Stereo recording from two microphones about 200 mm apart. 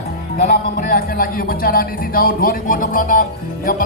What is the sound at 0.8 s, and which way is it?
Speech, 45° left (ahead or behind).